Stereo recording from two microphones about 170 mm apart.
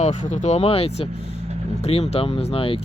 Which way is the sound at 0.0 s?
45° left (ahead or behind).